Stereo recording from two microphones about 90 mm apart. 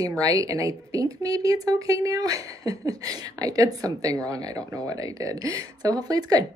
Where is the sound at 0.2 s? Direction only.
40° right (ahead or behind).